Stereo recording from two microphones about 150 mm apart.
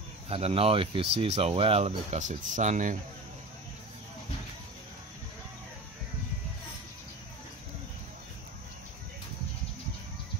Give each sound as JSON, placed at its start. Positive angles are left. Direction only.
{"t": 0.3, "sound": "speech", "side_deg": -40}